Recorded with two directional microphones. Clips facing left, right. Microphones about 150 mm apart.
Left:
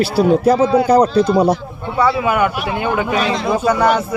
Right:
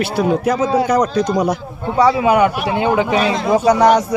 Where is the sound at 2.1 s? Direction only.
30° right (ahead or behind).